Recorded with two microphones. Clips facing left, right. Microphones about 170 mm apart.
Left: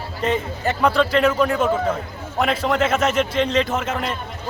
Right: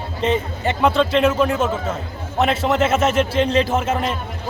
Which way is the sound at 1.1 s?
5° right (ahead or behind).